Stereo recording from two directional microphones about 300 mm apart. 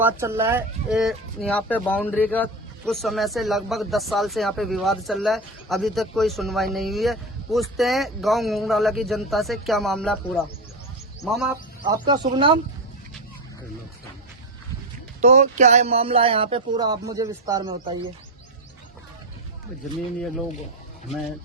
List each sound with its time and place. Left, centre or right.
0.0 s speech: centre
12.0 s speech: centre
15.2 s speech: right